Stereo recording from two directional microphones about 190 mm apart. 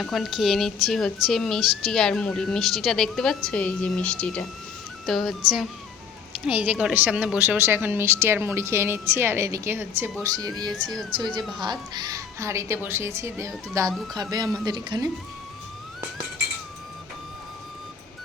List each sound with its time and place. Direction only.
0.0 s speech: centre (ahead or behind)
6.4 s speech: 10° right (ahead or behind)